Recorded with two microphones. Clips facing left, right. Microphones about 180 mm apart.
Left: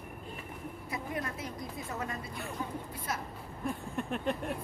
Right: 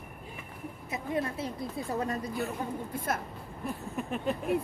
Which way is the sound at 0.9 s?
25° right (ahead or behind).